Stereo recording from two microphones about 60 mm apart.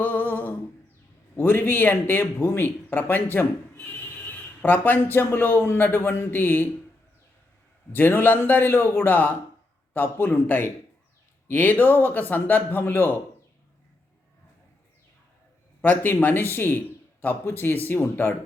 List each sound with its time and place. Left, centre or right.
0.0 s humming: left
1.4 s a man's voice: left
7.9 s a man's voice: left
15.8 s a man's voice: left